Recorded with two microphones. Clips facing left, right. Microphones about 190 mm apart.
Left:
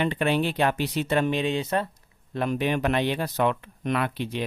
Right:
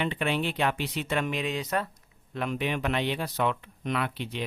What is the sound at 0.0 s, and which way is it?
Speech, 40° left (ahead or behind).